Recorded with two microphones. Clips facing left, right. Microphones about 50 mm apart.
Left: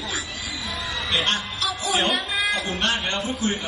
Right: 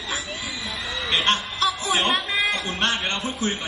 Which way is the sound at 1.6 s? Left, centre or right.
Right.